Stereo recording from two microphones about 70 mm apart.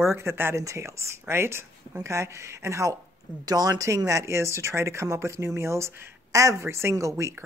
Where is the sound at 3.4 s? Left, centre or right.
Right.